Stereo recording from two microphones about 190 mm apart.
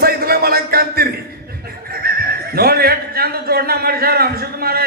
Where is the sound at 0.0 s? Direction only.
50° right (ahead or behind).